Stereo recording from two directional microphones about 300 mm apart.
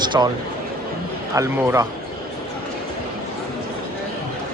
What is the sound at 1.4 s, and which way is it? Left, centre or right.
Speech, centre.